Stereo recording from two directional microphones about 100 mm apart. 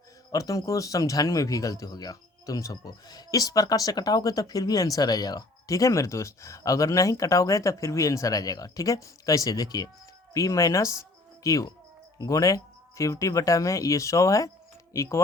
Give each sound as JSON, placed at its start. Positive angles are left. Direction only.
{"t": 0.3, "sound": "speech", "side_deg": 35}